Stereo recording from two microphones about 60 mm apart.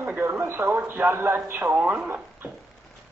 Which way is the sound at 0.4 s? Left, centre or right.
Right.